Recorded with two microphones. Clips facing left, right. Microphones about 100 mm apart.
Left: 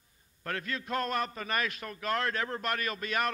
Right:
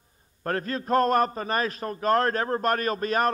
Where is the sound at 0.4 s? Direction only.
40° right (ahead or behind).